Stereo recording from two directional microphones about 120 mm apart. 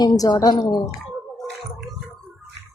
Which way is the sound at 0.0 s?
35° left (ahead or behind).